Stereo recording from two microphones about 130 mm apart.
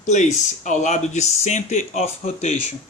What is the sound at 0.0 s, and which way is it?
Speech, 65° left (ahead or behind).